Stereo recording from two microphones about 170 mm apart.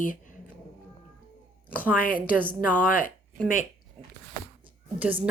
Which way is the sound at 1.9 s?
55° left (ahead or behind).